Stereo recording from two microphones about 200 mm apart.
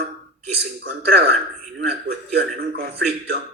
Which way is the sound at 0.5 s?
55° right (ahead or behind).